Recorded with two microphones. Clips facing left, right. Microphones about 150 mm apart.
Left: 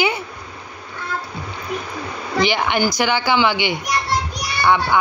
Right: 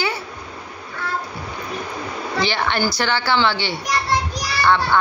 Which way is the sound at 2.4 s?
15° left (ahead or behind).